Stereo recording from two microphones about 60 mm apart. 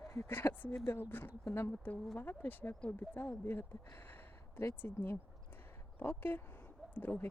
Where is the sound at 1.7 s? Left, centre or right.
Left.